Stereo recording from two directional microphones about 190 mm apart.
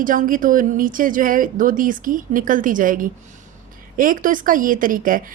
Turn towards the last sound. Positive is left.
turn(degrees=-45)  # may be behind; listen again after turning